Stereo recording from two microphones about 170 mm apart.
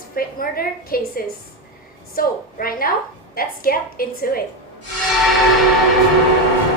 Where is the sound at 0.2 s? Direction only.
60° left (ahead or behind).